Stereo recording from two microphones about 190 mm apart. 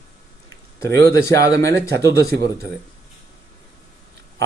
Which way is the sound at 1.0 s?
15° left (ahead or behind).